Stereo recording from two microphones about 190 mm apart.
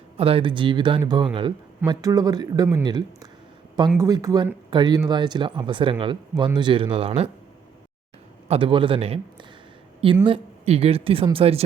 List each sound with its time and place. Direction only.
0.2 s speech: 30° right (ahead or behind)
8.4 s a man's voice: 30° right (ahead or behind)